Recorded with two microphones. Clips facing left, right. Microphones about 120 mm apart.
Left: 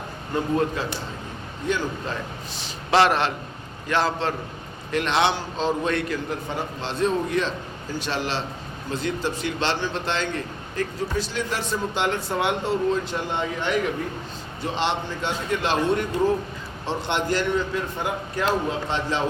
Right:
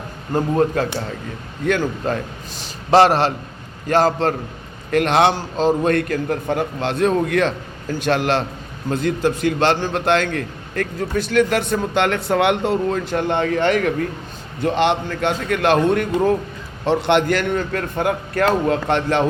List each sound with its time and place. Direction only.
0.3 s a man's voice: 40° right (ahead or behind)
1.6 s a man's voice: 60° right (ahead or behind)